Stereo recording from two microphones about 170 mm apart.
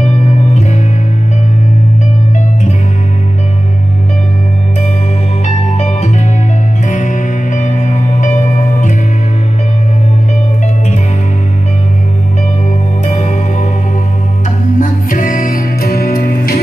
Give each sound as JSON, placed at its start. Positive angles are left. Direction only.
{"t": 5.8, "sound": "music", "side_deg": 40}
{"t": 13.0, "sound": "music", "side_deg": 45}
{"t": 14.8, "sound": "music", "side_deg": 50}